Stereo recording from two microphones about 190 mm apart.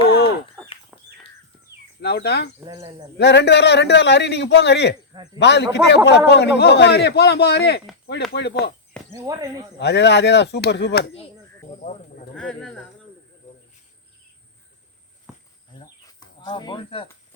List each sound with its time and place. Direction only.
0.9 s bird: centre (ahead or behind)
2.0 s a man's voice: 60° left (ahead or behind)
2.6 s speech: 15° right (ahead or behind)
3.2 s a man's voice: 65° left (ahead or behind)
5.1 s speech: 20° right (ahead or behind)
5.4 s a man's voice: 65° left (ahead or behind)
9.1 s speech: 20° right (ahead or behind)
9.7 s a man's voice: 65° left (ahead or behind)
11.8 s sheep: 40° left (ahead or behind)
12.4 s speech: 5° left (ahead or behind)
15.8 s bird: 20° left (ahead or behind)